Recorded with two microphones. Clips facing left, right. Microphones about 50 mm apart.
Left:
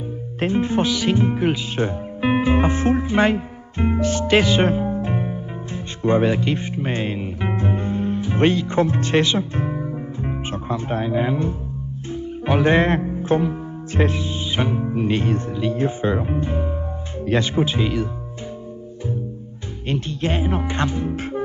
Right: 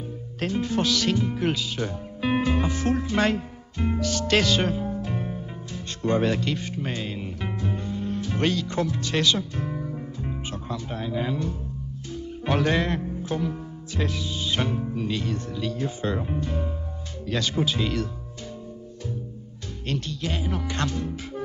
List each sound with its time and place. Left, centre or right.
0.4 s speech: left
1.1 s music: left
2.5 s speech: left
4.6 s music: left
5.7 s speech: left
6.5 s music: left
8.2 s speech: left
12.6 s music: left
14.5 s speech: centre
14.9 s speech: left
19.9 s speech: left
21.1 s music: left